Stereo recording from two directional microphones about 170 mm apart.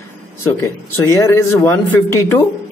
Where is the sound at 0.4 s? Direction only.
15° left (ahead or behind).